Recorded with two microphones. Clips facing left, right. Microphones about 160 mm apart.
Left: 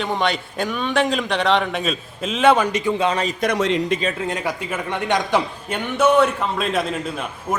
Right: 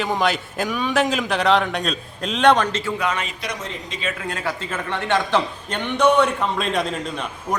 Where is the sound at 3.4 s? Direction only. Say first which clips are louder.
Left 11 dB; 65° left (ahead or behind).